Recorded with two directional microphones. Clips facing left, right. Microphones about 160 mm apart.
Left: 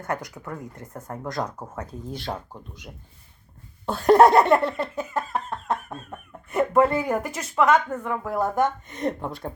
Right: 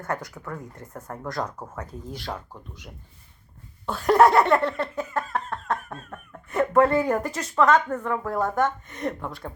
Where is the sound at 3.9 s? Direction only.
30° left (ahead or behind).